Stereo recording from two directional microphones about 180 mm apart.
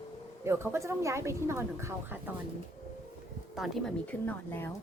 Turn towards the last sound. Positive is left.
turn(degrees=10)  # may be behind; listen again after turning